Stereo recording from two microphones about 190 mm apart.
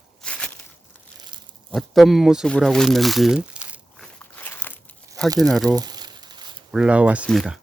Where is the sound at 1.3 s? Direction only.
25° right (ahead or behind).